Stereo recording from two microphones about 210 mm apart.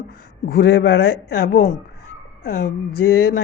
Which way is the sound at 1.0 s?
90° left.